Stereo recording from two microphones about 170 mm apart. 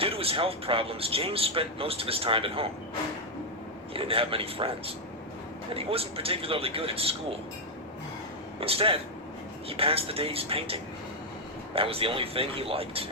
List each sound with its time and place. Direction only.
0.0 s speech: 35° right (ahead or behind)
3.9 s speech: 35° right (ahead or behind)
5.7 s speech: 35° right (ahead or behind)
8.6 s speech: 35° right (ahead or behind)